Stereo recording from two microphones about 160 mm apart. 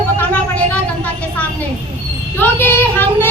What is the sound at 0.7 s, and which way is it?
Speech, 10° left (ahead or behind).